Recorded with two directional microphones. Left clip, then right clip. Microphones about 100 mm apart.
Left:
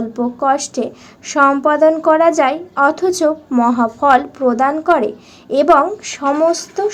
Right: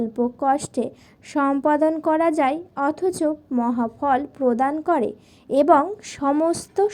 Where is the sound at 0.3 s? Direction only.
50° right (ahead or behind).